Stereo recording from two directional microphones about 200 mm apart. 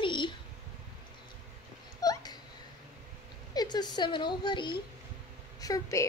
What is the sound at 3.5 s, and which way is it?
A woman's voice, 20° left (ahead or behind).